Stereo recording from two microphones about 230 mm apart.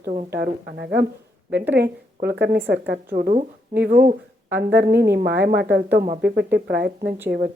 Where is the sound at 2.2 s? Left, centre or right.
Right.